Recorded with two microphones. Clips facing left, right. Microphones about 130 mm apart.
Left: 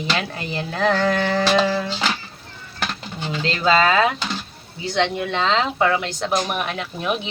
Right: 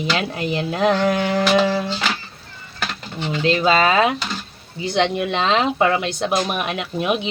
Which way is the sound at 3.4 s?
15° right (ahead or behind).